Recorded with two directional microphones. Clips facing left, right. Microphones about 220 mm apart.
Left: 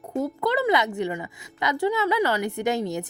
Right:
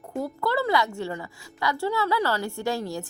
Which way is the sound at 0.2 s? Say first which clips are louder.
Left 2 dB; 20° left (ahead or behind).